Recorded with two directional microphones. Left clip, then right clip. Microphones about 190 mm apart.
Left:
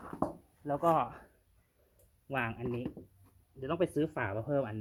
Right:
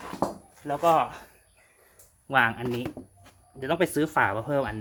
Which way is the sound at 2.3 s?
15° right (ahead or behind).